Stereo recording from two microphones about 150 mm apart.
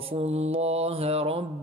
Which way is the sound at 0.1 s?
45° right (ahead or behind).